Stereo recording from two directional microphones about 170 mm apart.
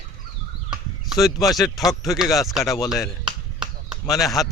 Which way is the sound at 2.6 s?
20° left (ahead or behind).